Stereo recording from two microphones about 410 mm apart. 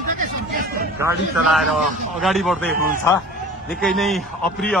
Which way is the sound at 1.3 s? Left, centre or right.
Centre.